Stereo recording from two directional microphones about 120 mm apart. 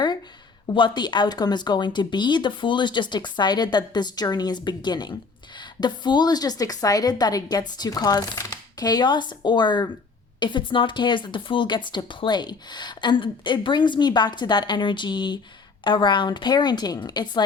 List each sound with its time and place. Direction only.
0.7 s speech: 40° left (ahead or behind)